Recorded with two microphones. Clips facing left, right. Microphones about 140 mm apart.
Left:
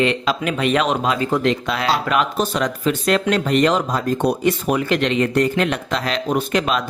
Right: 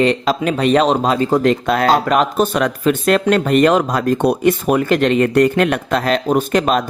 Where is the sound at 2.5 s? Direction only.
60° right (ahead or behind).